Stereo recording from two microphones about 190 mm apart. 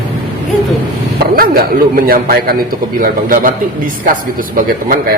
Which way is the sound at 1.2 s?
50° right (ahead or behind).